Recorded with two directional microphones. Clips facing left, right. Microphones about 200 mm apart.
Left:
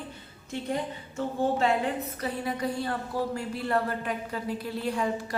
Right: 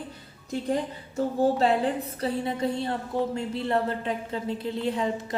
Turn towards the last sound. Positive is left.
turn(degrees=-20)  # may be behind; listen again after turning